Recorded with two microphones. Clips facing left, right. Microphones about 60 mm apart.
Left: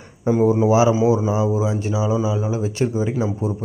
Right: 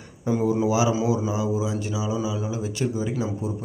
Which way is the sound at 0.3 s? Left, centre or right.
Left.